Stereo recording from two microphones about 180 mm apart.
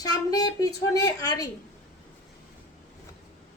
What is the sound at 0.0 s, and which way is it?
A woman's voice, 20° left (ahead or behind).